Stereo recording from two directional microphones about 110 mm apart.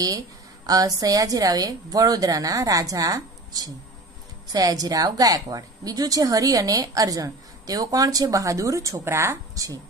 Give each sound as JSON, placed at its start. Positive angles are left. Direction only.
{"t": 0.7, "sound": "a woman's voice", "side_deg": -35}